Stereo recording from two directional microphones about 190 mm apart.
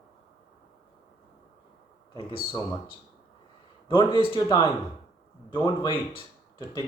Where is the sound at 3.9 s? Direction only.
25° left (ahead or behind).